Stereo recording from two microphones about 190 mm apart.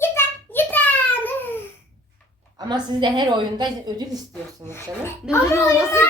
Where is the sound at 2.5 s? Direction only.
20° right (ahead or behind).